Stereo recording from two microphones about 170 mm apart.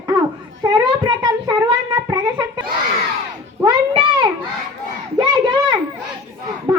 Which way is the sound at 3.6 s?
25° right (ahead or behind).